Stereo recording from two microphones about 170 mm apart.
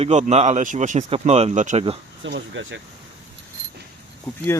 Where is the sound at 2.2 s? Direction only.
90° right.